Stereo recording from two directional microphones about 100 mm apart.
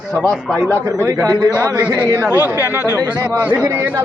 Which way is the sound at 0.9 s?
30° right (ahead or behind).